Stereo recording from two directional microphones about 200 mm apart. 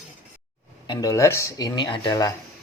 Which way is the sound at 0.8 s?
20° left (ahead or behind).